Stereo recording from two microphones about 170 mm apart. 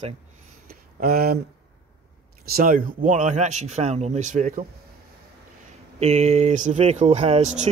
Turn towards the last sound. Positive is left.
turn(degrees=-40)  # may be behind; listen again after turning